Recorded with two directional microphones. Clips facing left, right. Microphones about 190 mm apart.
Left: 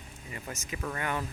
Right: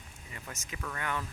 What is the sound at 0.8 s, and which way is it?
Speech, 25° left (ahead or behind).